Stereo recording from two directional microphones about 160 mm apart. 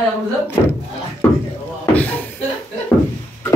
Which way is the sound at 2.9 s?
15° left (ahead or behind).